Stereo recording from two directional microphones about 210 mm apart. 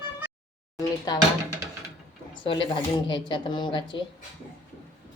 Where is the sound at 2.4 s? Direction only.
25° left (ahead or behind).